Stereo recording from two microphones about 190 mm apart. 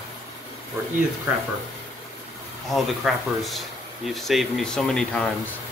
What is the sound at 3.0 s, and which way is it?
Speech, centre (ahead or behind).